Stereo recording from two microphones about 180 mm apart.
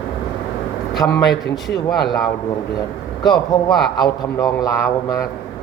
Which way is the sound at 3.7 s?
Centre (ahead or behind).